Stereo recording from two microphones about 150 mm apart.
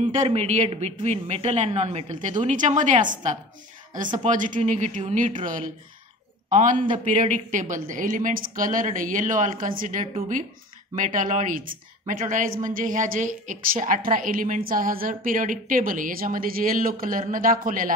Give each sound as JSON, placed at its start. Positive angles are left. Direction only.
{"t": 0.0, "sound": "a man's voice", "side_deg": -50}
{"t": 4.2, "sound": "a woman's voice", "side_deg": -60}
{"t": 12.2, "sound": "a woman's voice", "side_deg": -60}